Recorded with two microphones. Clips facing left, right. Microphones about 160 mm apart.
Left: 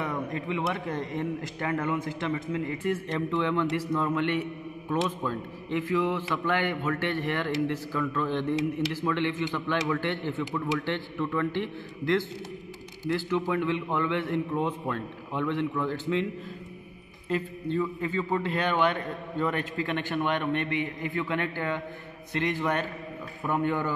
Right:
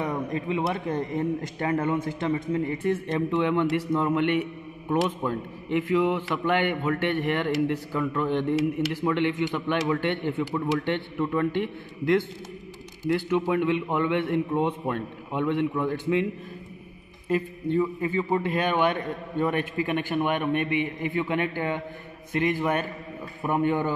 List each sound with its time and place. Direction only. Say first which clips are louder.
0.5 s a man's voice: right 3 dB; 30° right (ahead or behind)
3.1 s a man's voice: right 4 dB; 20° right (ahead or behind)
13.1 s a man's voice: right 3 dB; 20° right (ahead or behind)
17.3 s a man's voice: right 4 dB; 15° right (ahead or behind)